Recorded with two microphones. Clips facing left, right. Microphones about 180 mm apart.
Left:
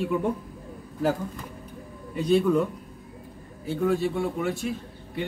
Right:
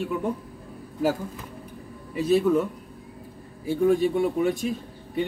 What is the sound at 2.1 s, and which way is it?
Speech, 5° right (ahead or behind).